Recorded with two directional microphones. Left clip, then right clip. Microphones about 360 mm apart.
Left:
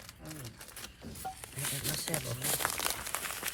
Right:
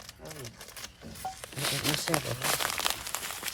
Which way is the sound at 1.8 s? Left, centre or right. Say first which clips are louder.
Right 7 dB; centre.